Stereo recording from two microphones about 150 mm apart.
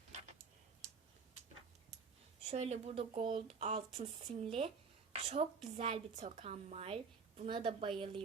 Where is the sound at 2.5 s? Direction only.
45° right (ahead or behind).